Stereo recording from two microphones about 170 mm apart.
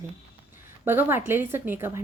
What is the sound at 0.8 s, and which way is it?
Speech, 10° right (ahead or behind).